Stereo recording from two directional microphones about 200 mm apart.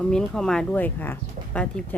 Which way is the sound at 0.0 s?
5° left (ahead or behind).